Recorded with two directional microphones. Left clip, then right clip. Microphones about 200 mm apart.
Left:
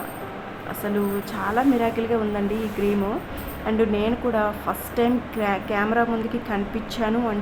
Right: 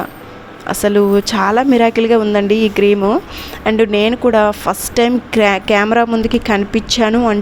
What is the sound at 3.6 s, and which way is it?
A woman's voice, 40° right (ahead or behind).